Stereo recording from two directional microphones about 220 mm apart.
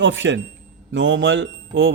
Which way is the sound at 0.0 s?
55° right (ahead or behind).